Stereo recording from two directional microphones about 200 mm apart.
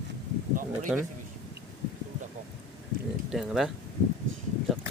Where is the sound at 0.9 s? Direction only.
5° right (ahead or behind).